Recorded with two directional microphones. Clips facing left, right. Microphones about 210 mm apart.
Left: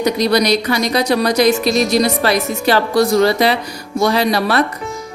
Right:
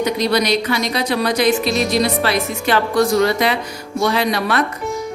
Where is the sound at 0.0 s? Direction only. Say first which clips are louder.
Left 3 dB; 40° left (ahead or behind).